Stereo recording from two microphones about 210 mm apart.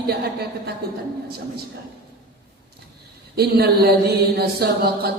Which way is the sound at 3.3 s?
50° right (ahead or behind).